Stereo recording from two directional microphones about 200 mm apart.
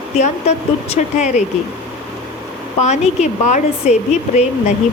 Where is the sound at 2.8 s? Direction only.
35° left (ahead or behind).